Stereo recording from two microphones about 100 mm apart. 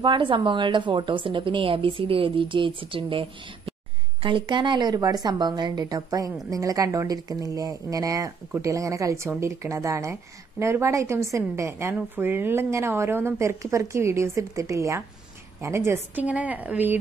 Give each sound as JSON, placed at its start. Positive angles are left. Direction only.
{"t": 0.0, "sound": "a woman's voice", "side_deg": -55}
{"t": 16.3, "sound": "speech", "side_deg": -15}